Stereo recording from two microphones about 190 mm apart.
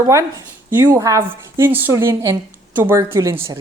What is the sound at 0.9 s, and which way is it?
Speech, 15° right (ahead or behind).